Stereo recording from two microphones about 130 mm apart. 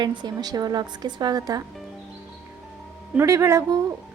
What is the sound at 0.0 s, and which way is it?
A woman's voice, 35° right (ahead or behind).